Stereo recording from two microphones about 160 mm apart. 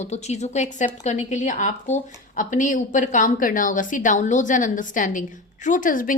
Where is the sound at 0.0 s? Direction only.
45° left (ahead or behind).